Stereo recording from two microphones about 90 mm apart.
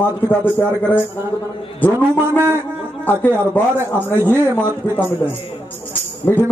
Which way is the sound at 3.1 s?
20° left (ahead or behind).